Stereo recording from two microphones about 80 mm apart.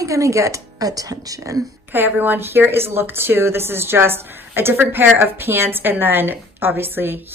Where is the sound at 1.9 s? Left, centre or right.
Right.